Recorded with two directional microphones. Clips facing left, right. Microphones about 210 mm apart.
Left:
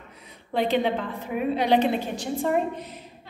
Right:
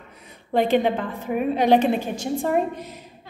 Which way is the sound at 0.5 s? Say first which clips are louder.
Right 4 dB; 50° right (ahead or behind).